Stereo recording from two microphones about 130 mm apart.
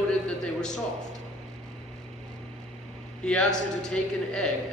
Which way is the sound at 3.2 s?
5° left (ahead or behind).